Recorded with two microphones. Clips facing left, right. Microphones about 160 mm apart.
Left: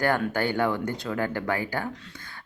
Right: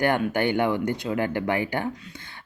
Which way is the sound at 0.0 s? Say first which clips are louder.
Right 2 dB; 20° right (ahead or behind).